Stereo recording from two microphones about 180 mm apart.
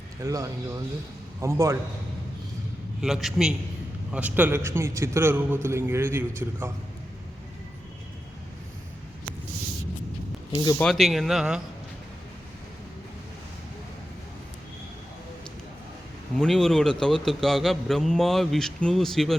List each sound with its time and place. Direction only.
0.2 s a man's voice: 20° right (ahead or behind)
3.0 s a man's voice: centre (ahead or behind)
10.5 s speech: 25° left (ahead or behind)
10.8 s a man's voice: centre (ahead or behind)
16.4 s a man's voice: centre (ahead or behind)